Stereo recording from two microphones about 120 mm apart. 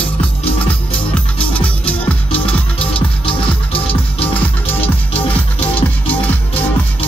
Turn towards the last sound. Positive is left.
turn(degrees=15)  # may be behind; listen again after turning